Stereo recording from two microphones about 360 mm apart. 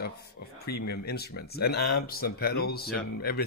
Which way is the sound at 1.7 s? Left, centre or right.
Left.